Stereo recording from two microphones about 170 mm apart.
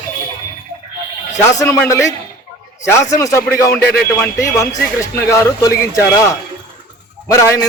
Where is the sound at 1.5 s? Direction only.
15° left (ahead or behind).